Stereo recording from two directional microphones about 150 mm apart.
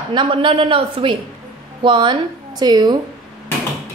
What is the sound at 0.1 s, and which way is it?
A woman's voice, 35° right (ahead or behind).